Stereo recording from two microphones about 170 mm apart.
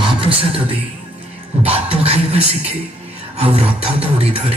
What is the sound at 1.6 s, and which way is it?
Music, 35° right (ahead or behind).